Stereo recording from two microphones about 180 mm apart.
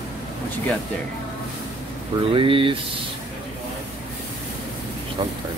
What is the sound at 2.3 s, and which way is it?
Speech, 30° right (ahead or behind).